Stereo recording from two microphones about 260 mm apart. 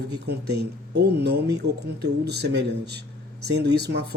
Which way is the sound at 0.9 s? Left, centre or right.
Right.